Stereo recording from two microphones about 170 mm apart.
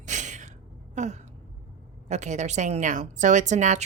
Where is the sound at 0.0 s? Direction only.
45° right (ahead or behind).